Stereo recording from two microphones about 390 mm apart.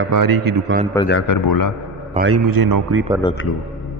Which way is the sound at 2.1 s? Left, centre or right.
Right.